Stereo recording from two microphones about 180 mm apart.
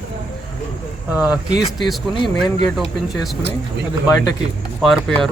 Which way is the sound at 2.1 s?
25° left (ahead or behind).